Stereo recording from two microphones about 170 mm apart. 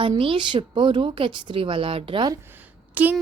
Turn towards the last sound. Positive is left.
turn(degrees=-10)  # may be behind; listen again after turning